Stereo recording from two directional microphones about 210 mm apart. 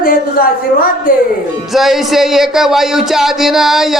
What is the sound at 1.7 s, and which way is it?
Speech, centre (ahead or behind).